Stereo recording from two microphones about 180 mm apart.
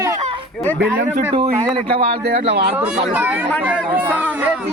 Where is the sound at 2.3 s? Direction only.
65° right (ahead or behind).